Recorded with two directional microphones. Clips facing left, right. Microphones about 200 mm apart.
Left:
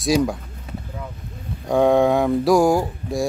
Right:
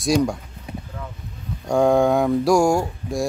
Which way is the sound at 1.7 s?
Centre (ahead or behind).